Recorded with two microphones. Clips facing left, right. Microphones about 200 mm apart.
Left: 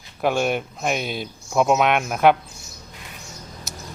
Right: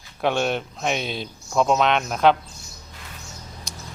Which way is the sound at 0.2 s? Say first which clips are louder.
Left 1 dB; 5° left (ahead or behind).